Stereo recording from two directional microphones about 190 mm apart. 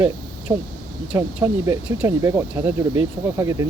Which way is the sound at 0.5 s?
15° right (ahead or behind).